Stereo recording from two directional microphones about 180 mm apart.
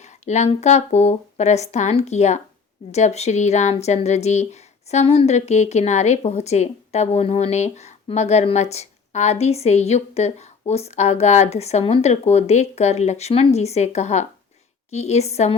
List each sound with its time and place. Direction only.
0.0 s speech: 40° left (ahead or behind)